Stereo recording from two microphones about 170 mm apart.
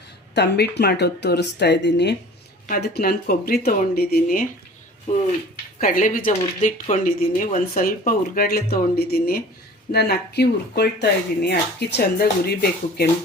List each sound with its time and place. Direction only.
0.3 s speech: 80° left
2.6 s speech: 60° left (ahead or behind)
5.1 s speech: 45° left (ahead or behind); by 13.1 s 65° left (ahead or behind)